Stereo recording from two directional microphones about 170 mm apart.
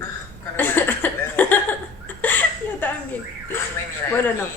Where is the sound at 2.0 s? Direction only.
10° left (ahead or behind).